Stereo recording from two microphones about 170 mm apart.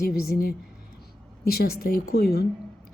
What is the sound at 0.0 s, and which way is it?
A woman's voice, 65° left (ahead or behind).